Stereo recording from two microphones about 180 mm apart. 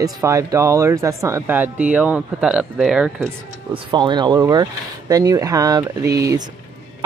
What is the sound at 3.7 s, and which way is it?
Speech, 25° right (ahead or behind).